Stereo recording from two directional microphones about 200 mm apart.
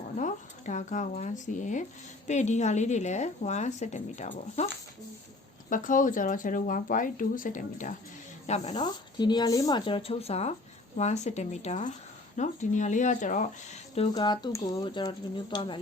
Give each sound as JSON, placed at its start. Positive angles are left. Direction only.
{"t": 0.2, "sound": "a woman's voice", "side_deg": 40}
{"t": 8.7, "sound": "a woman's voice", "side_deg": 20}
{"t": 14.1, "sound": "speech", "side_deg": 20}